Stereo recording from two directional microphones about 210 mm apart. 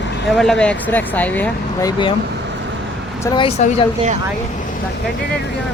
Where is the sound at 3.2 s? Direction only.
20° left (ahead or behind).